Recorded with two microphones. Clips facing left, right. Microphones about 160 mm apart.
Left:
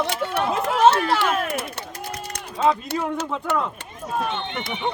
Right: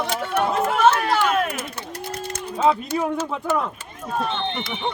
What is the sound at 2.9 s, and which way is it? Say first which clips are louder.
Speech: right 2 dB; 15° right (ahead or behind).